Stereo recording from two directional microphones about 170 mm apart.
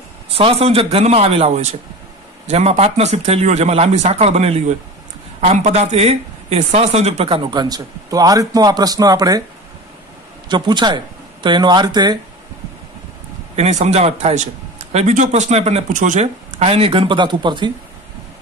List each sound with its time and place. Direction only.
0.3 s a man's voice: 35° right (ahead or behind)
10.5 s speech: 25° right (ahead or behind)
13.6 s a man's voice: 40° right (ahead or behind)